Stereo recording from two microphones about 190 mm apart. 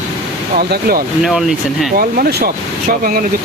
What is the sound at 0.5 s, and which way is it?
Speech, 50° right (ahead or behind).